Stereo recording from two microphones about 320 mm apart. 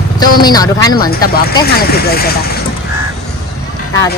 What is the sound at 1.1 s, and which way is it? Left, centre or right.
Speech, left.